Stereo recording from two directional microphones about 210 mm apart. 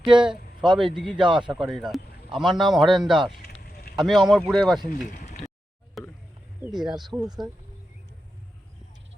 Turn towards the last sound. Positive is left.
turn(degrees=0)  # may be behind; listen again after turning